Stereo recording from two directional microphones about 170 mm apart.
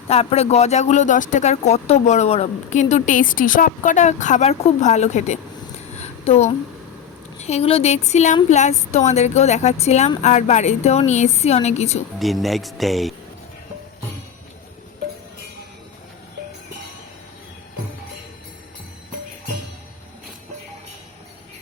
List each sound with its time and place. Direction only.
0.1 s speech: 35° left (ahead or behind)
6.0 s a sound: 40° left (ahead or behind)
7.3 s speech: 40° left (ahead or behind)
12.2 s speech: centre (ahead or behind)